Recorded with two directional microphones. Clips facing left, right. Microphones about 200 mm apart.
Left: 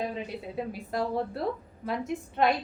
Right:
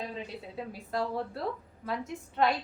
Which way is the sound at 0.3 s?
15° left (ahead or behind).